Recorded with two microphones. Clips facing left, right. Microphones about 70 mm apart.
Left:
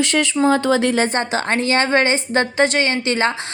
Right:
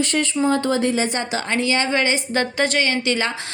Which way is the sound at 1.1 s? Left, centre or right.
Left.